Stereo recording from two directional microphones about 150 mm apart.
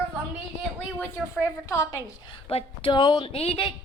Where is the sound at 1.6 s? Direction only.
20° left (ahead or behind).